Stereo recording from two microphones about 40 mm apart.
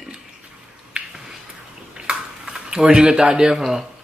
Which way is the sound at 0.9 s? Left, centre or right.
Right.